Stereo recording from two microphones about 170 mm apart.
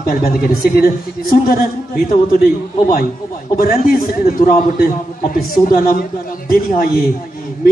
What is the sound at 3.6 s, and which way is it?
A man's voice, 60° left (ahead or behind).